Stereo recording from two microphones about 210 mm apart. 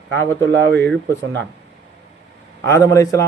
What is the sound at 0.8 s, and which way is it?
Speech, 10° left (ahead or behind).